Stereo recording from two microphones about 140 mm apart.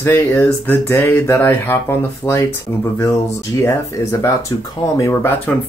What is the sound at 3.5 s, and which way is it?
Speech, 20° left (ahead or behind).